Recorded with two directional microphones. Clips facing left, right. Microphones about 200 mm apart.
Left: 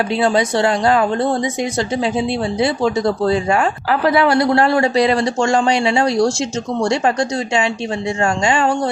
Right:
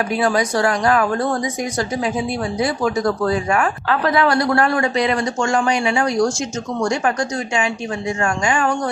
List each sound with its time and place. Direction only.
0.1 s speech: 25° left (ahead or behind)